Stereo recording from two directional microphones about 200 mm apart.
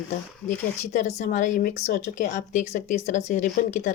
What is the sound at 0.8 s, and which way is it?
Speech, 35° left (ahead or behind).